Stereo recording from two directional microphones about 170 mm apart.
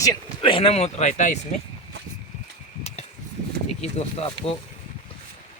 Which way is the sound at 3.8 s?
40° left (ahead or behind).